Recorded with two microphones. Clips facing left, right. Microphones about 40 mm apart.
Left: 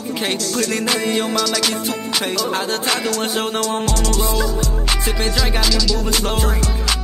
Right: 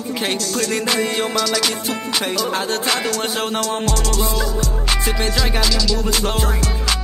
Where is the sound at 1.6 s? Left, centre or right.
Centre.